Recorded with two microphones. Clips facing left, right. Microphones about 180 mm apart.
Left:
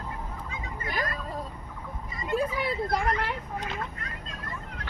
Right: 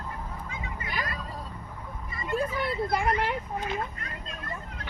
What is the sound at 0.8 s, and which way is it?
Speech, 45° left (ahead or behind).